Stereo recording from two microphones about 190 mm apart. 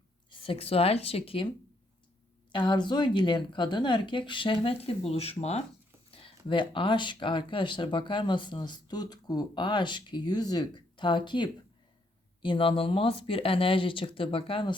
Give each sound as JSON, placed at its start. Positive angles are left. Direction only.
{"t": 0.3, "sound": "speech", "side_deg": 30}
{"t": 2.5, "sound": "speech", "side_deg": 25}